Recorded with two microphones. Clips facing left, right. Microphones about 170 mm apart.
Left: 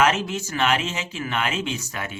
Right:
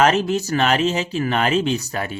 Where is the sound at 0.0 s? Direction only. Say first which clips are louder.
Right 4 dB; 35° right (ahead or behind).